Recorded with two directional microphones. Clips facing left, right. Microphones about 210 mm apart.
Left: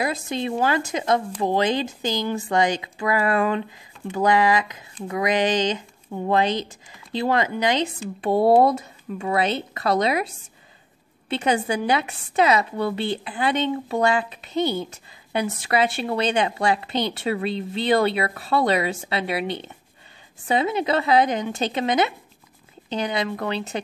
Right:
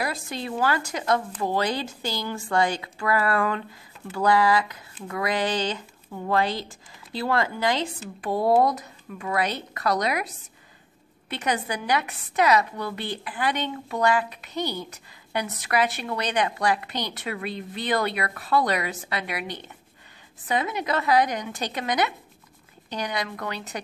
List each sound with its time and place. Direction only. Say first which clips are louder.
0.0 s a woman's voice: left 5 dB; 20° left (ahead or behind)